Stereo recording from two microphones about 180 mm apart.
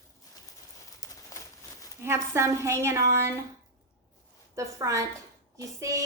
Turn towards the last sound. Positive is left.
turn(degrees=-15)  # may be behind; listen again after turning